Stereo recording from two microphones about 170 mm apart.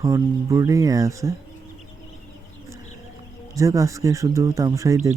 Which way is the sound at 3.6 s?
20° right (ahead or behind).